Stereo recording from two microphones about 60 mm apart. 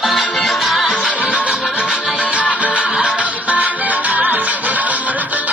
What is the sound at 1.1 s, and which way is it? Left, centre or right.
Music, right.